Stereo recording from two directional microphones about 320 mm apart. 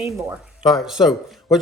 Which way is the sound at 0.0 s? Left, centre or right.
Centre.